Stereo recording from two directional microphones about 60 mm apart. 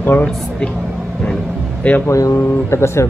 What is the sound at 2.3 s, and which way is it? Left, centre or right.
Speech, left.